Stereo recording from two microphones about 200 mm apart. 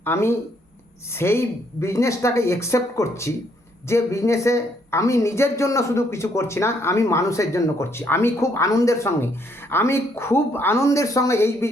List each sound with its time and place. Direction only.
0.0 s speech: 10° left (ahead or behind)